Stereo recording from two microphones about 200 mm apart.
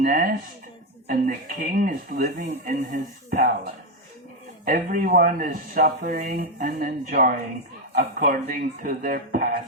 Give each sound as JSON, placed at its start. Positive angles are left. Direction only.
{"t": 0.0, "sound": "speech", "side_deg": -40}
{"t": 4.6, "sound": "speech", "side_deg": -45}